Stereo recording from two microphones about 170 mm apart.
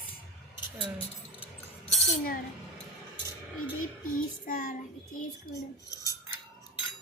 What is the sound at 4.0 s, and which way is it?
Child singing, 50° left (ahead or behind).